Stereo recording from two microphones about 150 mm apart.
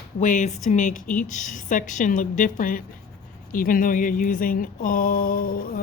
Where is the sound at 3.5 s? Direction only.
65° left (ahead or behind).